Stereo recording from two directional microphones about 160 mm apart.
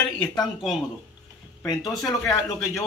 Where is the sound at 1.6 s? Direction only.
25° left (ahead or behind).